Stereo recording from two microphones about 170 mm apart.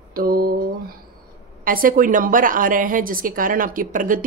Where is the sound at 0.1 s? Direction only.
60° right (ahead or behind).